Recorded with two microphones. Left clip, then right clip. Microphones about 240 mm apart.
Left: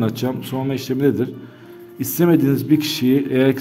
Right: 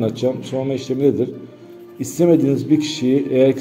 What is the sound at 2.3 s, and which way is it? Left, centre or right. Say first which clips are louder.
A man's voice: right 1 dB; left.